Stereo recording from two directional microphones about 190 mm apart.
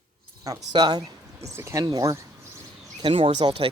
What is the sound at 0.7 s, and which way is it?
Speech, 20° right (ahead or behind).